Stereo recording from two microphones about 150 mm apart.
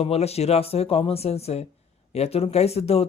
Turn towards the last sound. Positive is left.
turn(degrees=45)  # may be behind; listen again after turning